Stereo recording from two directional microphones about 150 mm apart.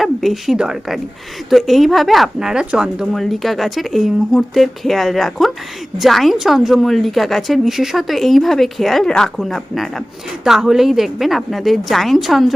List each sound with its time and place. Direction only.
0.0 s a woman's voice: centre (ahead or behind)